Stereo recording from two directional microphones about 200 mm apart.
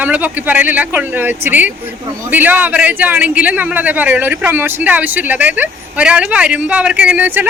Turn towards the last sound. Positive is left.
turn(degrees=-10)  # may be behind; listen again after turning